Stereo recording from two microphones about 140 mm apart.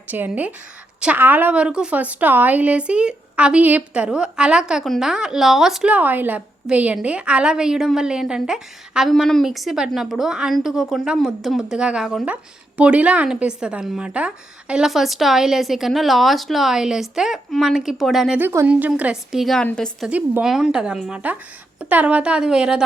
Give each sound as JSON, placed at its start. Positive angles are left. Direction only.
{"t": 0.1, "sound": "a woman's voice", "side_deg": -10}
{"t": 18.3, "sound": "a woman's voice", "side_deg": -15}
{"t": 20.1, "sound": "speech", "side_deg": -10}